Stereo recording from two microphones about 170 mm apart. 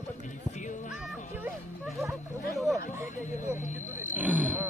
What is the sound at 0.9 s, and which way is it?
Music, 5° right (ahead or behind).